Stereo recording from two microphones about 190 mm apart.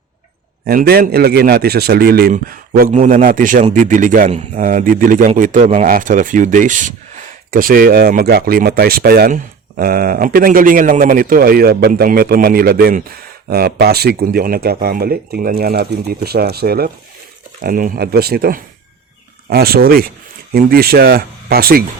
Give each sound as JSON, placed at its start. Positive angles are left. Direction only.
{"t": 0.6, "sound": "speech", "side_deg": -50}